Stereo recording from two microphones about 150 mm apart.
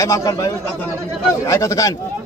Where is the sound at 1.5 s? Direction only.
20° left (ahead or behind).